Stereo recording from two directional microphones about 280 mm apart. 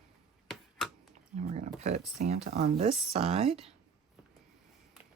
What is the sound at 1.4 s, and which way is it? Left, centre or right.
Speech, right.